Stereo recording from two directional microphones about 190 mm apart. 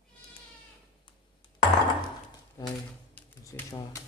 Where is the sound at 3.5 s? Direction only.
15° left (ahead or behind).